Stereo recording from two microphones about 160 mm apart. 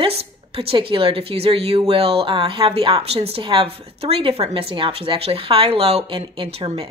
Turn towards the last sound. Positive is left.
turn(degrees=-40)  # may be behind; listen again after turning